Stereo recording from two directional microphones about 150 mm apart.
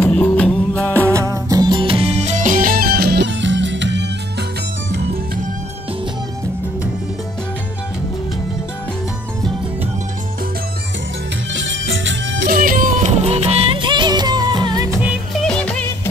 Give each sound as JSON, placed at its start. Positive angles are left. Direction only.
{"t": 0.0, "sound": "music", "side_deg": 10}
{"t": 0.9, "sound": "music", "side_deg": -20}
{"t": 12.4, "sound": "music", "side_deg": -70}
{"t": 15.4, "sound": "music", "side_deg": 5}